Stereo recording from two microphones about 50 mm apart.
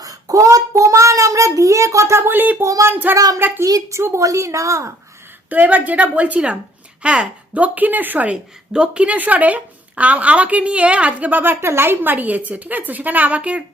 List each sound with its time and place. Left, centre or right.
0.4 s child singing: right
2.6 s speech: right
2.9 s a woman's voice: right
3.6 s a woman's voice: right
4.1 s a woman's voice: right
5.5 s a woman's voice: right
8.3 s speech: right
11.6 s a woman's voice: right